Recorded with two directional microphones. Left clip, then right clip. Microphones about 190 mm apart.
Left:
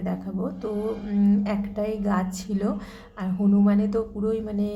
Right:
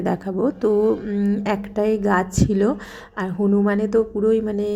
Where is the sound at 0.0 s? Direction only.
35° right (ahead or behind).